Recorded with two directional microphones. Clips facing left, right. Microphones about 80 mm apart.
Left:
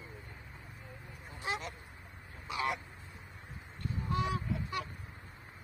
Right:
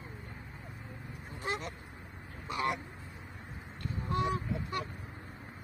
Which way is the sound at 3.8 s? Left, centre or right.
Right.